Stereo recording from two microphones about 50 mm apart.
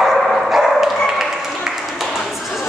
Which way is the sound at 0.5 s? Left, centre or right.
Centre.